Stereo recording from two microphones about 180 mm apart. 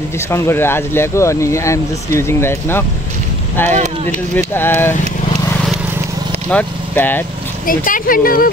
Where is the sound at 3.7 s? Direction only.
40° right (ahead or behind).